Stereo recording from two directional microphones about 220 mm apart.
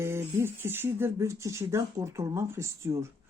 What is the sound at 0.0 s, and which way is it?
Speech, 10° right (ahead or behind).